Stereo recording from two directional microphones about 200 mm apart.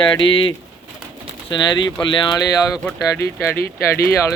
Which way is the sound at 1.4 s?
20° left (ahead or behind).